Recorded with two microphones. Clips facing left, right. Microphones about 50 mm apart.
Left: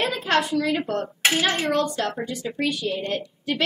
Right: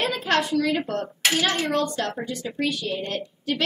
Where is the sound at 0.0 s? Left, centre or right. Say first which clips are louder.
Left 1 dB; centre.